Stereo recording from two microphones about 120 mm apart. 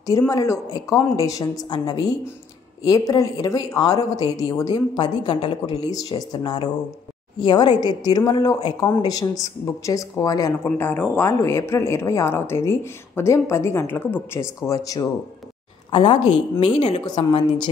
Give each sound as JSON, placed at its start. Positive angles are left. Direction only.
{"t": 0.3, "sound": "speech", "side_deg": 30}
{"t": 5.9, "sound": "speech", "side_deg": 30}
{"t": 10.8, "sound": "speech", "side_deg": 15}
{"t": 15.9, "sound": "a woman's voice", "side_deg": 45}